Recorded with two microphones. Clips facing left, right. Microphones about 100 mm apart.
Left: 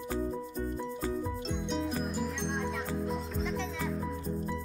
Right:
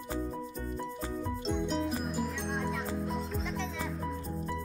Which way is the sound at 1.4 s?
Centre (ahead or behind).